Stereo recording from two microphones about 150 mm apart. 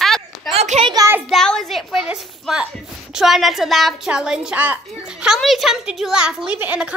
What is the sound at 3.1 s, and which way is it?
A woman's voice, centre (ahead or behind).